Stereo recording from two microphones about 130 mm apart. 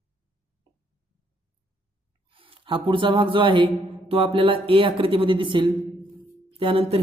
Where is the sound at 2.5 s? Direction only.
40° right (ahead or behind).